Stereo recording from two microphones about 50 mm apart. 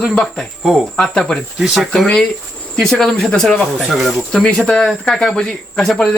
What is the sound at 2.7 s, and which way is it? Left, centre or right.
Speech, centre.